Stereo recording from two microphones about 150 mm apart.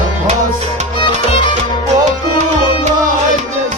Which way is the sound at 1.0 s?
30° left (ahead or behind).